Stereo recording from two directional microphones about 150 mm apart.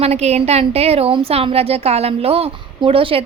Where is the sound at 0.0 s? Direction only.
45° right (ahead or behind).